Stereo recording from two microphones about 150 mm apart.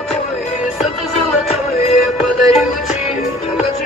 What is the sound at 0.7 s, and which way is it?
Music, centre (ahead or behind).